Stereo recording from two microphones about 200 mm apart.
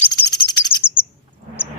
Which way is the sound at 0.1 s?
20° left (ahead or behind).